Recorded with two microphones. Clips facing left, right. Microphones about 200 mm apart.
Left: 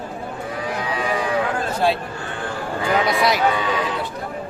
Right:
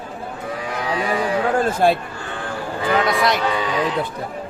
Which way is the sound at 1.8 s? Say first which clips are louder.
Right 2 dB; 50° right (ahead or behind).